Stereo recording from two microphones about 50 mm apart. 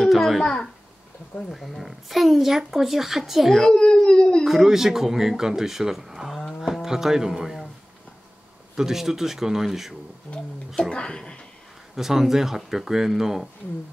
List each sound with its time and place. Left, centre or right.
0.0 s a sound: centre
1.5 s speech: centre
3.7 s speech: centre
4.5 s speech: centre
8.7 s speech: centre
10.3 s speech: left
11.9 s speech: centre